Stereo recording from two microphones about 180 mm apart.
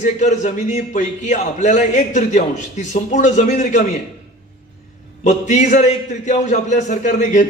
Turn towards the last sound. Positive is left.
turn(degrees=45)  # may be behind; listen again after turning